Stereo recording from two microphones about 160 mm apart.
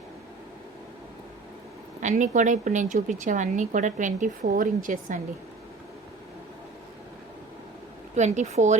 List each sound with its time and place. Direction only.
2.0 s speech: 50° right (ahead or behind)
8.1 s speech: 45° right (ahead or behind)